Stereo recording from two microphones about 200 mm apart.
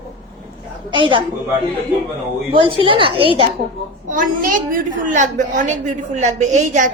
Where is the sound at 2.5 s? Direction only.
25° right (ahead or behind).